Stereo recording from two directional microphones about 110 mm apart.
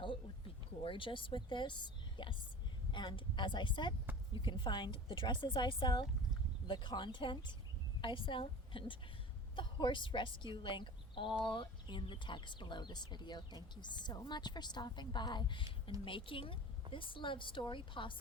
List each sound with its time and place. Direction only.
0.8 s a woman's voice: 50° left (ahead or behind)